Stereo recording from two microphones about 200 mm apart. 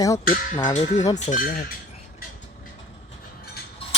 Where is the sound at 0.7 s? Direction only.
35° left (ahead or behind).